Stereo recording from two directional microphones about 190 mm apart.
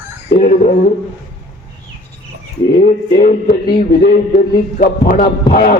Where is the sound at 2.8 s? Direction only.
50° left (ahead or behind).